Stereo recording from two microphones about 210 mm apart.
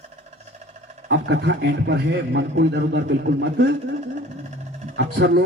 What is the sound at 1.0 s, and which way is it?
A man's voice, 55° right (ahead or behind).